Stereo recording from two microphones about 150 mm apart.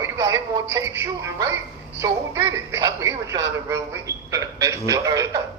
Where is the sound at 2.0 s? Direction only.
20° right (ahead or behind).